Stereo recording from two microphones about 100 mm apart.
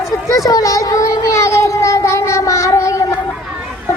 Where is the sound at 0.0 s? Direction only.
30° left (ahead or behind).